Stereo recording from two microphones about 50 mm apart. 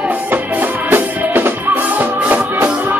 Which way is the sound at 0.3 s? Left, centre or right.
Right.